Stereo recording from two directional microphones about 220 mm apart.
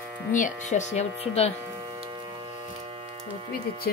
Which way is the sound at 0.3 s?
35° left (ahead or behind).